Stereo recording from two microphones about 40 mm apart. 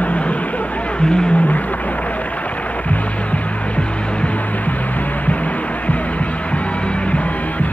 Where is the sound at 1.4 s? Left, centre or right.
Left.